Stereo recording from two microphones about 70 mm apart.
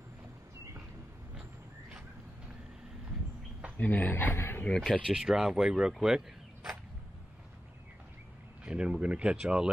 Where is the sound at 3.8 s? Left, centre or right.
Left.